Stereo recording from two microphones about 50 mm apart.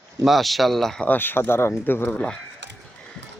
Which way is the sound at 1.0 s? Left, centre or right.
Left.